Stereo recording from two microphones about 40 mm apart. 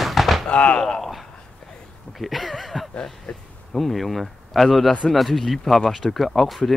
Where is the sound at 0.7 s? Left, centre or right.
Centre.